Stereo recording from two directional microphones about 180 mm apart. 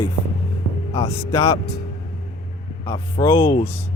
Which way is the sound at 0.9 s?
15° left (ahead or behind).